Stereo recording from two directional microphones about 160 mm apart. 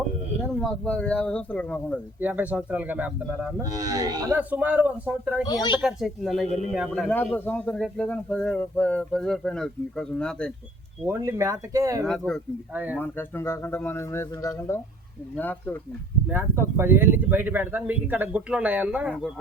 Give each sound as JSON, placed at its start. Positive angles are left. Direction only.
{"t": 0.5, "sound": "speech", "side_deg": 5}
{"t": 2.2, "sound": "speech", "side_deg": -10}
{"t": 3.6, "sound": "speech", "side_deg": -20}
{"t": 4.4, "sound": "speech", "side_deg": -10}
{"t": 5.5, "sound": "speech", "side_deg": 30}
{"t": 5.8, "sound": "speech", "side_deg": 0}
{"t": 11.0, "sound": "speech", "side_deg": -15}
{"t": 12.0, "sound": "speech", "side_deg": 5}
{"t": 12.7, "sound": "speech", "side_deg": -10}
{"t": 13.0, "sound": "speech", "side_deg": 15}
{"t": 16.3, "sound": "speech", "side_deg": -15}